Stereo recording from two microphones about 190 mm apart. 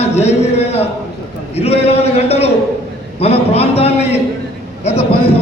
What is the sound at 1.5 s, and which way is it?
A man's voice, 35° left (ahead or behind).